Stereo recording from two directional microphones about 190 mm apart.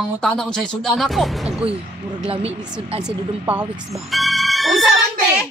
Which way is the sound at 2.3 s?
30° right (ahead or behind).